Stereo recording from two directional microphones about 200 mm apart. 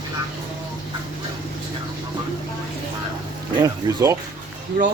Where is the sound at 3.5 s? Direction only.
15° right (ahead or behind).